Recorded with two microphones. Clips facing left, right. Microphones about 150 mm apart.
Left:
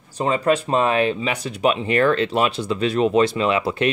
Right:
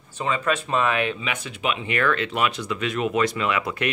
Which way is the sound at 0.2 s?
35° left (ahead or behind).